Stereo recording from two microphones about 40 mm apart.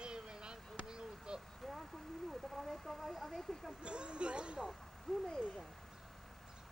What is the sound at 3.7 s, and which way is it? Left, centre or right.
Vehicle, right.